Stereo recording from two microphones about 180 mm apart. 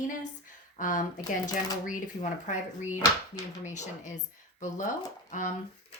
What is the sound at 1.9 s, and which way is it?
Speech, 45° left (ahead or behind).